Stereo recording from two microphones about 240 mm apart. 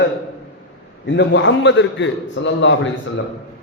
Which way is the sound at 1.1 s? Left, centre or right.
Left.